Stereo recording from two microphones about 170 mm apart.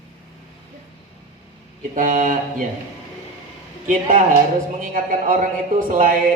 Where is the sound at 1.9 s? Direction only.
50° right (ahead or behind).